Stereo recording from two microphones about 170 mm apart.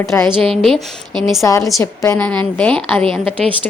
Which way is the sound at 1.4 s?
15° left (ahead or behind).